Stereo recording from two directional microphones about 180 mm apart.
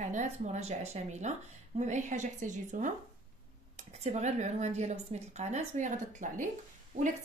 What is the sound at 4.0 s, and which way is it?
A woman's voice, 40° right (ahead or behind).